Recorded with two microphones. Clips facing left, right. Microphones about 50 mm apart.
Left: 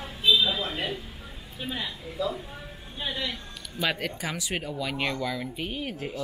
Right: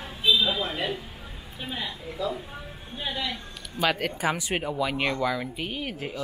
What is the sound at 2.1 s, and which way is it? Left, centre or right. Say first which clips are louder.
Speech: left 1 dB; centre.